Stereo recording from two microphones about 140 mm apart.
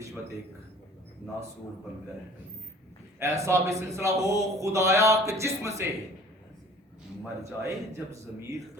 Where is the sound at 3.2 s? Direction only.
20° right (ahead or behind).